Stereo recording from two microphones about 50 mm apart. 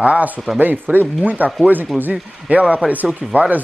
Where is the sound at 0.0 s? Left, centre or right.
Right.